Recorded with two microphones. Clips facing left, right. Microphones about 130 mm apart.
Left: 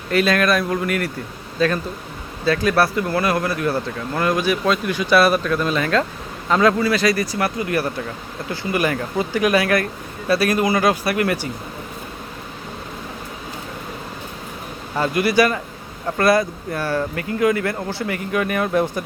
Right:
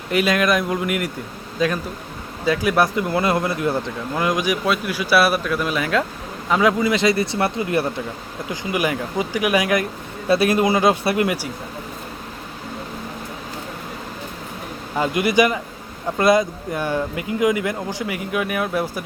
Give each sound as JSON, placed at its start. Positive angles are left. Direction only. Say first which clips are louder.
{"t": 0.1, "sound": "speech", "louder": "left 1 dB", "side_deg": -15}
{"t": 8.4, "sound": "speech", "louder": "left 1 dB", "side_deg": -15}
{"t": 14.9, "sound": "speech", "louder": "even", "side_deg": -20}